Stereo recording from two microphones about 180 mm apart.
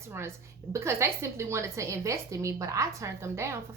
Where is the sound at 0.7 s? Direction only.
15° right (ahead or behind).